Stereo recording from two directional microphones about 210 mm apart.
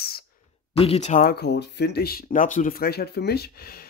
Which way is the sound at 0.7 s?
30° left (ahead or behind).